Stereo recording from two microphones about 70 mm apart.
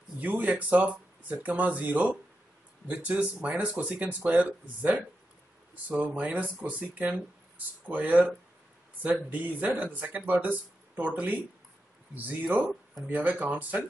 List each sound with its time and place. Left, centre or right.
0.2 s speech: right
9.3 s speech: right
12.5 s speech: right